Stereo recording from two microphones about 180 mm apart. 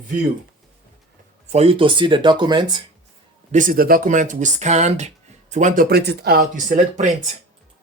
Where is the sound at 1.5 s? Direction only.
30° right (ahead or behind).